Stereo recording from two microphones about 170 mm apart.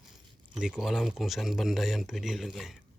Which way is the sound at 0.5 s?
5° right (ahead or behind).